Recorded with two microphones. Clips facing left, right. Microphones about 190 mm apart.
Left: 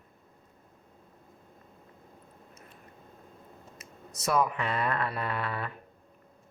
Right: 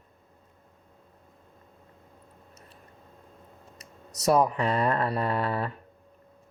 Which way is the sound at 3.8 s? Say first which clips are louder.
Right 7 dB; 40° right (ahead or behind).